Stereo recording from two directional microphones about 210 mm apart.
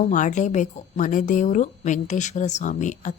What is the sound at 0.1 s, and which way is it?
A woman's voice, 35° left (ahead or behind).